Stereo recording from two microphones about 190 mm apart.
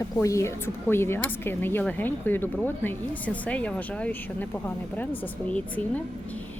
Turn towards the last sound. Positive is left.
turn(degrees=5)  # may be behind; listen again after turning